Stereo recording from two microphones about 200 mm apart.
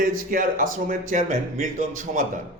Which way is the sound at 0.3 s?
45° right (ahead or behind).